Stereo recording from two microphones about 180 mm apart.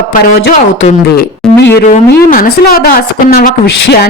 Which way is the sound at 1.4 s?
5° left (ahead or behind).